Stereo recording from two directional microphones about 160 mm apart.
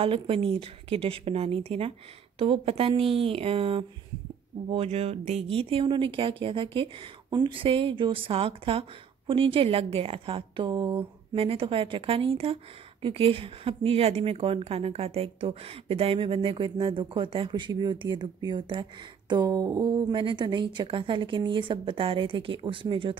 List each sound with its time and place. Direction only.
0.0 s a woman's voice: 35° right (ahead or behind)